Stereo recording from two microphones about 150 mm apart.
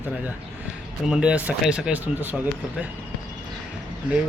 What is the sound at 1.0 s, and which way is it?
Speech, 5° right (ahead or behind).